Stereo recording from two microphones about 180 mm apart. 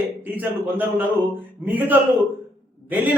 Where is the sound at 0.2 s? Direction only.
10° right (ahead or behind).